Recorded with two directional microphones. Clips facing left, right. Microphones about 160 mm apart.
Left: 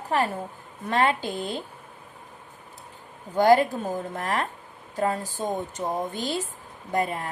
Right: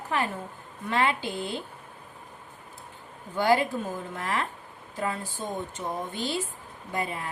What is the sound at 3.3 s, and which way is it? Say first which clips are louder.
Speech: left 5 dB; 40° left (ahead or behind).